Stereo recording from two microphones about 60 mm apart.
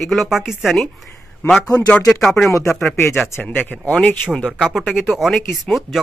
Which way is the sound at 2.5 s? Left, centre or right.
Left.